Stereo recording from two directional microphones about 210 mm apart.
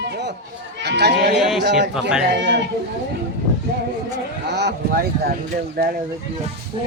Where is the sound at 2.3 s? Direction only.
55° right (ahead or behind).